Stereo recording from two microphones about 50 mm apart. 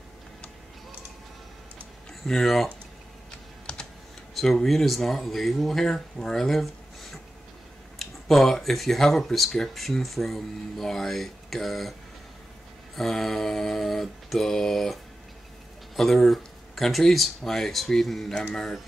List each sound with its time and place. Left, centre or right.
2.2 s speech: centre
3.3 s typing: centre
4.4 s speech: centre
12.9 s mantra: centre
16.0 s speech: centre
18.5 s mantra: centre